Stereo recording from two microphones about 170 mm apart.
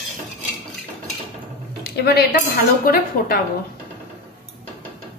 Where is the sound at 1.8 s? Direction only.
70° left (ahead or behind).